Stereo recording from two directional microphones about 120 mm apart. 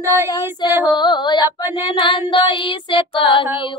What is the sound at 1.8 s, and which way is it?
Child singing, 45° left (ahead or behind).